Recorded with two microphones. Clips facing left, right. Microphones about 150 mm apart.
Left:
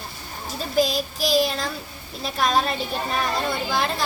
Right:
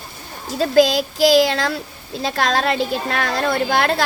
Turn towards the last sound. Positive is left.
turn(degrees=-75)  # may be behind; listen again after turning